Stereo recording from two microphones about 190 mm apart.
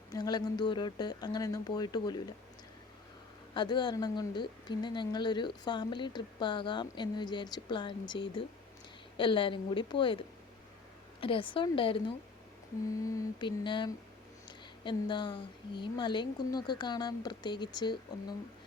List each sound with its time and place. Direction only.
0.1 s speech: 20° left (ahead or behind)
3.5 s speech: 25° left (ahead or behind)
11.2 s speech: 25° left (ahead or behind)
13.0 s speech: 15° left (ahead or behind)